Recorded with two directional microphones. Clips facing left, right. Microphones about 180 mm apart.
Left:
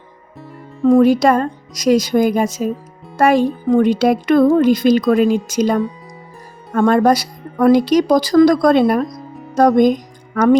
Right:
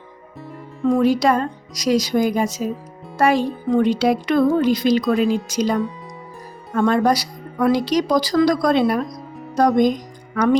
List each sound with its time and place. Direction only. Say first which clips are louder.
0.9 s speech: left 5 dB; 50° left (ahead or behind)
9.0 s music: left 2 dB; centre (ahead or behind)
9.6 s speech: left 4 dB; 50° left (ahead or behind)